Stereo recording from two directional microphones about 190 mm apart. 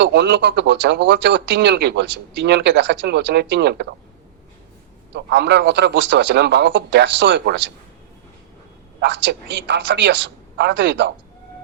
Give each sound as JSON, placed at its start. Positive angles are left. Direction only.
{"t": 0.0, "sound": "speech", "side_deg": -65}
{"t": 5.1, "sound": "a man's voice", "side_deg": -60}
{"t": 9.0, "sound": "speech", "side_deg": -65}